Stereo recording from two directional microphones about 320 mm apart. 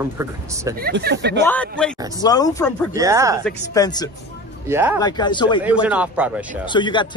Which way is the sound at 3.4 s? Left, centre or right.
Centre.